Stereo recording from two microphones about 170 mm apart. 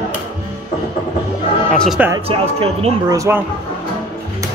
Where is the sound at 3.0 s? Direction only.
15° right (ahead or behind).